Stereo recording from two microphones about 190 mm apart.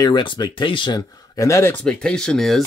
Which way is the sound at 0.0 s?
25° left (ahead or behind).